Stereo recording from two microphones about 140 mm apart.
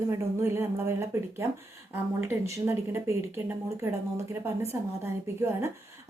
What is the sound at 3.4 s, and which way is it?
Speech, 20° right (ahead or behind).